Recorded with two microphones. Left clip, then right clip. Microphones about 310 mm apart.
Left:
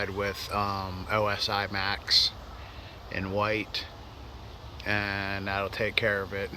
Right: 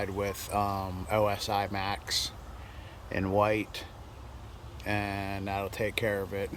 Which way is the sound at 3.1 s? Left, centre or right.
Centre.